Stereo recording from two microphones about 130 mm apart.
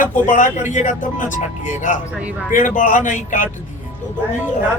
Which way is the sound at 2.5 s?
90° left.